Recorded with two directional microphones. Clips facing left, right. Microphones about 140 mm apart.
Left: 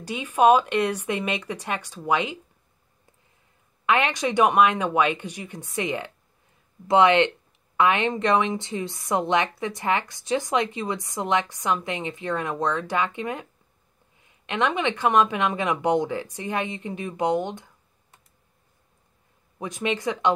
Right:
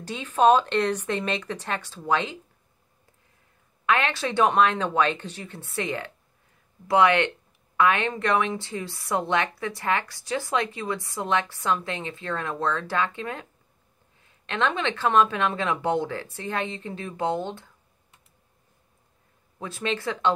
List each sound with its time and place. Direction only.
0.0 s speech: 10° left (ahead or behind)
3.8 s speech: 20° left (ahead or behind)
19.6 s speech: 15° left (ahead or behind)